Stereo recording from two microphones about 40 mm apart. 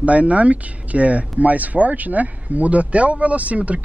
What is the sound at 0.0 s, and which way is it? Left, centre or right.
Speech, right.